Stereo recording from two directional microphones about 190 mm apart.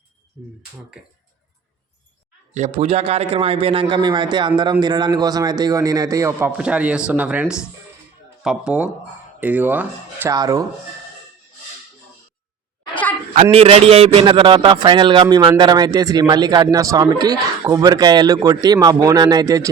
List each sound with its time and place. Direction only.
0.4 s speech: centre (ahead or behind)
2.6 s a man's voice: 35° right (ahead or behind); by 6.5 s 15° right (ahead or behind)
6.6 s speech: 5° right (ahead or behind)
12.9 s a sound: 10° left (ahead or behind)
13.3 s a man's voice: 30° right (ahead or behind)